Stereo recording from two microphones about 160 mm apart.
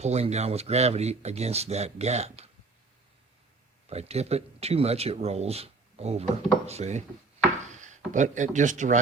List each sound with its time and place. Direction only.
0.0 s speech: 40° right (ahead or behind)
3.8 s speech: 40° right (ahead or behind)